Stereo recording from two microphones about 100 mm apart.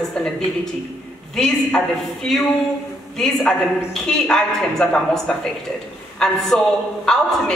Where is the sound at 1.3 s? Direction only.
5° left (ahead or behind).